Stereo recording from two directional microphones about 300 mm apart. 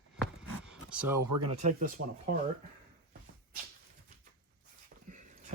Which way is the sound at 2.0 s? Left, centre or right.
Right.